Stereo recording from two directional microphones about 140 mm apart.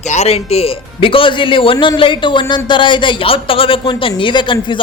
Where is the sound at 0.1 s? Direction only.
50° left (ahead or behind).